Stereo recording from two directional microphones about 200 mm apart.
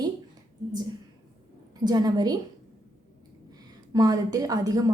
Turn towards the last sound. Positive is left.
turn(degrees=-15)  # may be behind; listen again after turning